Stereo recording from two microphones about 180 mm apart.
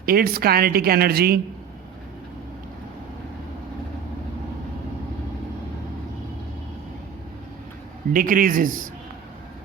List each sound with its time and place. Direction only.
0.0 s a woman's voice: 55° right (ahead or behind)
8.1 s a man's voice: 50° right (ahead or behind)